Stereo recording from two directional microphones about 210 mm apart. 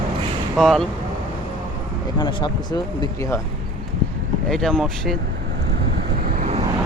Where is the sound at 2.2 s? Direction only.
20° left (ahead or behind).